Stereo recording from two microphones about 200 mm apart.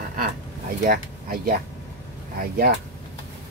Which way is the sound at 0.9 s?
45° right (ahead or behind).